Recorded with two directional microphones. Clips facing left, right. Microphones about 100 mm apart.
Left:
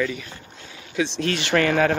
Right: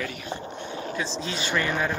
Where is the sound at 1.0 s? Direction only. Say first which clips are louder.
Left 10 dB; 70° left (ahead or behind).